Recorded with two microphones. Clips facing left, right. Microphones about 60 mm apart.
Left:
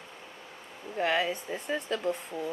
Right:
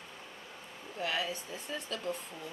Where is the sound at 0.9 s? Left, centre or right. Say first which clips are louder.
Left 7 dB; left.